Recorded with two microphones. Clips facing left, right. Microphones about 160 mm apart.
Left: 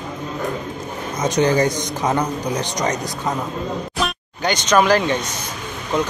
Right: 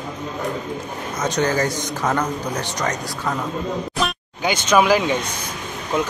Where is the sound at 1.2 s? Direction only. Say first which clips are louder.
Left 4 dB; 15° left (ahead or behind).